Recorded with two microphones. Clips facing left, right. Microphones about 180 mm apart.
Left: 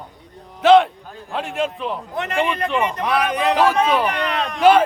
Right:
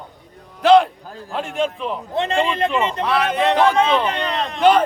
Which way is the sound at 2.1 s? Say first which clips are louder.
Right 3 dB; 25° right (ahead or behind).